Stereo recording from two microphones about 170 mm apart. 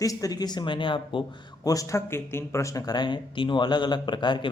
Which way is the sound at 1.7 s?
20° left (ahead or behind).